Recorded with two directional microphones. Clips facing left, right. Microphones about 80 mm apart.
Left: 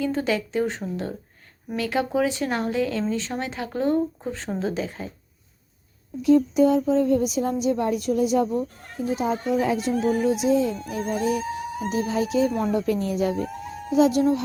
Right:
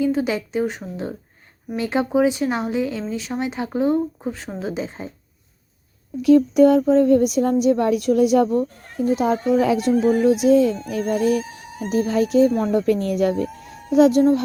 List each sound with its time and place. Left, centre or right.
0.0 s speech: centre
1.7 s speech: right
6.2 s speech: right